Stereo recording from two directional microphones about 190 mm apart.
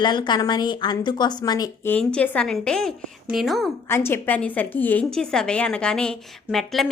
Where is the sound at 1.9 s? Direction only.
5° left (ahead or behind).